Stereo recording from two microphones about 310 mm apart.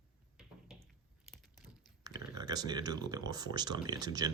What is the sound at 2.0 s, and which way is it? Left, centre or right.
Speech, centre.